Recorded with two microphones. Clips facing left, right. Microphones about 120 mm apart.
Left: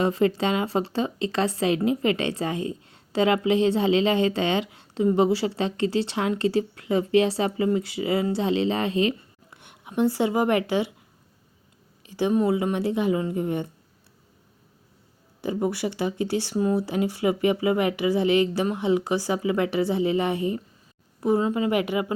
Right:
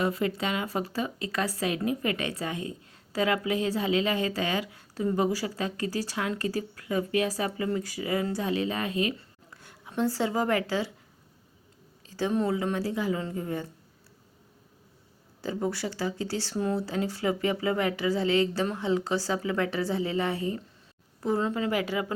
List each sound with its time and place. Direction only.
0.0 s a woman's voice: 30° left (ahead or behind)
12.0 s speech: 15° left (ahead or behind)
15.4 s speech: 15° left (ahead or behind)